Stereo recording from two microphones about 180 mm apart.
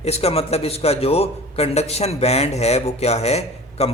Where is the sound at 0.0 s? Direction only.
35° left (ahead or behind).